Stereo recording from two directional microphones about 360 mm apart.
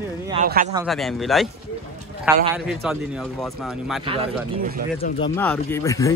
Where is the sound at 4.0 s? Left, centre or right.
Centre.